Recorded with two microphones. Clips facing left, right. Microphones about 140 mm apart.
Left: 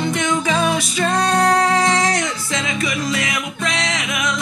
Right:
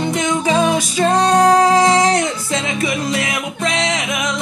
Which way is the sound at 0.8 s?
35° right (ahead or behind).